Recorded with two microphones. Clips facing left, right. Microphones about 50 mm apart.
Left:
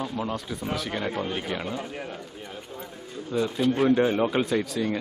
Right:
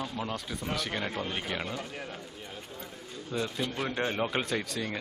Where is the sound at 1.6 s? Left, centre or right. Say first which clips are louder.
Left 5 dB; centre.